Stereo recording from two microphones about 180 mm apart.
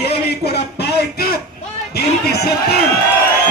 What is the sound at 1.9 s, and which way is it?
Speech, 60° left (ahead or behind).